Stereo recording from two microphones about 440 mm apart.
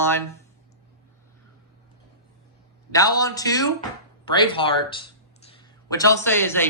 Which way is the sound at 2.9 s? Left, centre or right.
Centre.